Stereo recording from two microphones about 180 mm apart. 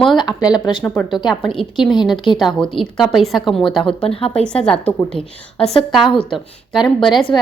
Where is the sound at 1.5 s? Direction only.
Centre (ahead or behind).